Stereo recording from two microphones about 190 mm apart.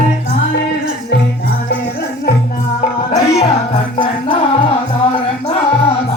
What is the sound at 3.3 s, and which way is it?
Music, 35° left (ahead or behind).